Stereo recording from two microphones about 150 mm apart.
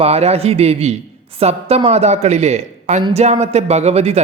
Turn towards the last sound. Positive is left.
turn(degrees=-45)  # may be behind; listen again after turning